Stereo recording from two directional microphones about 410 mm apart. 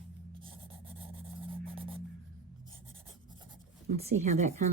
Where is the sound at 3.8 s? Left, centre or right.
Centre.